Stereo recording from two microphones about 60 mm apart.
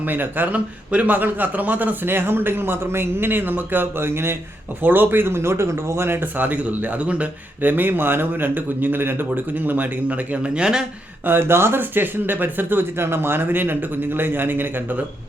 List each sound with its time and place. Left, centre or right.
0.0 s a man's voice: right
6.3 s speech: right
11.3 s a man's voice: right